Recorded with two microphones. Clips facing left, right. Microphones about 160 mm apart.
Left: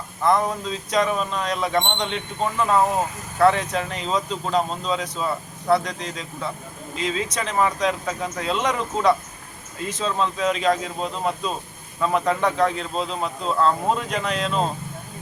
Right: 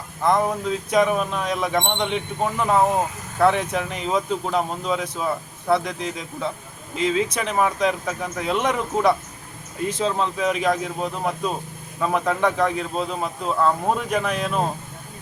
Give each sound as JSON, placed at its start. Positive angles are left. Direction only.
{"t": 0.3, "sound": "speech", "side_deg": -15}